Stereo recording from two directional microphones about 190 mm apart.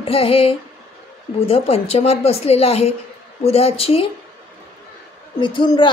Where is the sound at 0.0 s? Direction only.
30° left (ahead or behind).